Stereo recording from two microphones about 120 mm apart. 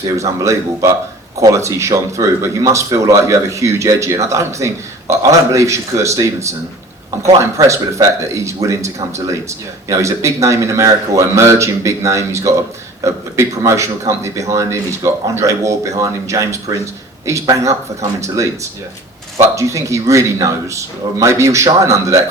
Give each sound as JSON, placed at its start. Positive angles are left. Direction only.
{"t": 0.0, "sound": "speech", "side_deg": -25}
{"t": 19.5, "sound": "speech", "side_deg": -25}